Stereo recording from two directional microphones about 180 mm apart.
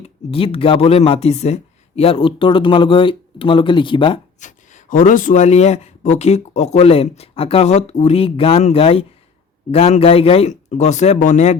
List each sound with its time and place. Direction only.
0.0 s speech: 30° left (ahead or behind)
4.4 s speech: 45° left (ahead or behind)